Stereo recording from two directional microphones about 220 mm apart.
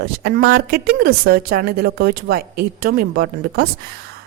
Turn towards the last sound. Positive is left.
turn(degrees=-45)  # may be behind; listen again after turning